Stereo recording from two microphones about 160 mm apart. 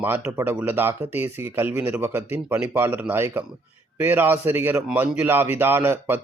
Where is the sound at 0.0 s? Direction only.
15° right (ahead or behind).